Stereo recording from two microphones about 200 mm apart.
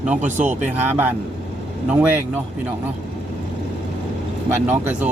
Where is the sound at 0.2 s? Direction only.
35° right (ahead or behind).